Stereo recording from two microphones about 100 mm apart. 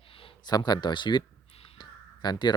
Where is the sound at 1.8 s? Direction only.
45° left (ahead or behind).